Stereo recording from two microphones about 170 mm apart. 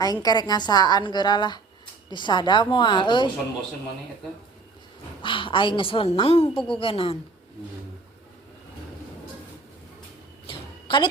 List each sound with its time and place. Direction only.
0.0 s a woman's voice: 20° left (ahead or behind)
5.2 s a woman's voice: 30° left (ahead or behind)
10.5 s a sound: 30° left (ahead or behind)